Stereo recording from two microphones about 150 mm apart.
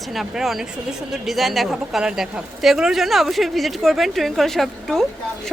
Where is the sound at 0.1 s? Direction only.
Centre (ahead or behind).